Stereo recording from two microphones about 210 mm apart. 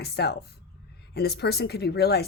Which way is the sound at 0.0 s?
50° left (ahead or behind).